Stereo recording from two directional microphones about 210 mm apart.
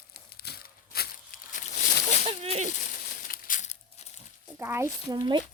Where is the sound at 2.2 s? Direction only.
30° right (ahead or behind).